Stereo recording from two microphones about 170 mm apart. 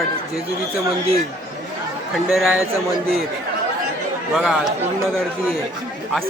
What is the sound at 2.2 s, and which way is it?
Speech, centre (ahead or behind).